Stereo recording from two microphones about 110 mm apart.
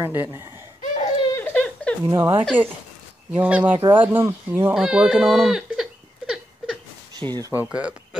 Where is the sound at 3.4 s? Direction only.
10° right (ahead or behind).